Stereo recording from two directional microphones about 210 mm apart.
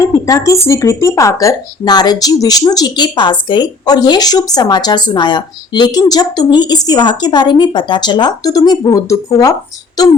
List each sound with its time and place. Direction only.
0.0 s speech: 15° left (ahead or behind)